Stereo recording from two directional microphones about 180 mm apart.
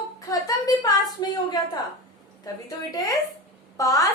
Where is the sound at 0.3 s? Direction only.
20° left (ahead or behind).